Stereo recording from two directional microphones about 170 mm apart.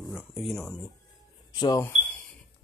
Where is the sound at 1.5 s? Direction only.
20° left (ahead or behind).